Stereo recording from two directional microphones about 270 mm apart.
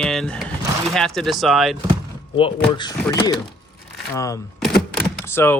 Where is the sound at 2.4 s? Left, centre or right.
Centre.